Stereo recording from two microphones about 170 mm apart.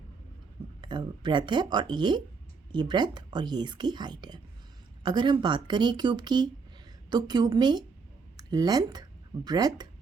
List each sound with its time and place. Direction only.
0.8 s speech: 25° right (ahead or behind)